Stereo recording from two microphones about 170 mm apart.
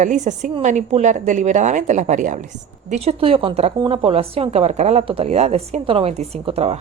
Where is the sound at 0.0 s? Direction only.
45° right (ahead or behind).